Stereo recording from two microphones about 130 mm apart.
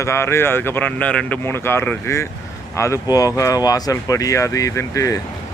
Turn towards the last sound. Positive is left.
turn(degrees=25)  # may be behind; listen again after turning